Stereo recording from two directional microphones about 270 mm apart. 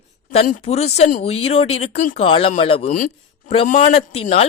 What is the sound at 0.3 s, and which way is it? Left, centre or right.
Speech, left.